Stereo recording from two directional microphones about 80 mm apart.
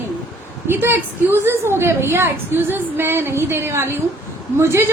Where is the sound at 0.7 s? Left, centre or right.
Right.